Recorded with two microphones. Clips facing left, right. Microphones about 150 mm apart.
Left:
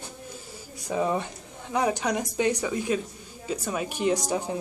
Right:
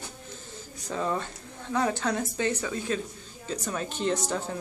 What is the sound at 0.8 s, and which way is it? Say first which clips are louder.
A woman's voice: left 4 dB; 15° left (ahead or behind).